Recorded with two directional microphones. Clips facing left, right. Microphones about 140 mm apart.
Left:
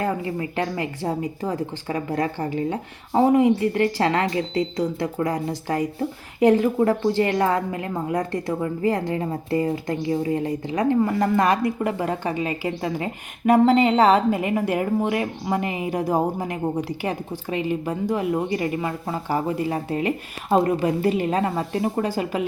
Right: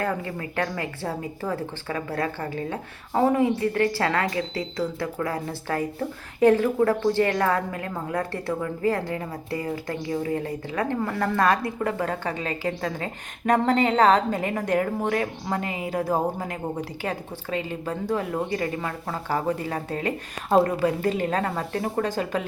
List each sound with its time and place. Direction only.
0.0 s speech: 20° left (ahead or behind)